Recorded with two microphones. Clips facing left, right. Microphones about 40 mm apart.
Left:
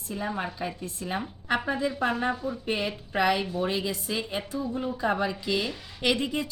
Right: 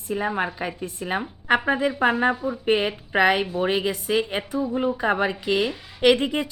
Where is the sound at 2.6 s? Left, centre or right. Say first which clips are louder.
Right 10 dB; right.